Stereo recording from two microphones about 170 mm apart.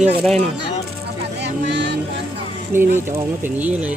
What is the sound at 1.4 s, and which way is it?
Vehicle, 90° right.